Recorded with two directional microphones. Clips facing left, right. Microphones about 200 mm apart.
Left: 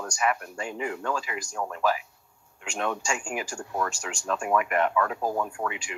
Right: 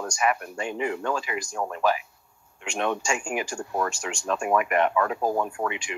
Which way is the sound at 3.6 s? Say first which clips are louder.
Right 3 dB; 20° right (ahead or behind).